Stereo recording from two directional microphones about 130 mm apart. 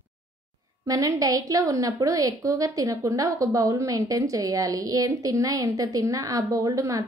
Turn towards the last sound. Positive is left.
turn(degrees=-25)  # may be behind; listen again after turning